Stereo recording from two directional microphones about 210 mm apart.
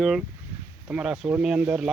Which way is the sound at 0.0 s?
Centre (ahead or behind).